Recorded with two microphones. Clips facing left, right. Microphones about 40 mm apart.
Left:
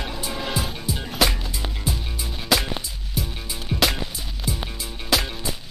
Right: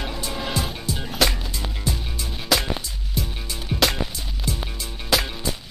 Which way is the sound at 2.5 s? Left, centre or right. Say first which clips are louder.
Even; centre.